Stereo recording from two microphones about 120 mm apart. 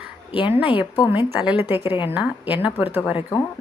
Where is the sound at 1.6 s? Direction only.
20° right (ahead or behind).